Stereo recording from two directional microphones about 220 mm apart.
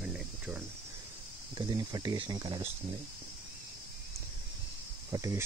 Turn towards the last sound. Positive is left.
turn(degrees=-15)  # may be behind; listen again after turning